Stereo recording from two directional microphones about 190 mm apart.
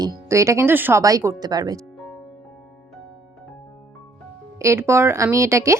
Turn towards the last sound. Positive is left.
turn(degrees=-15)  # may be behind; listen again after turning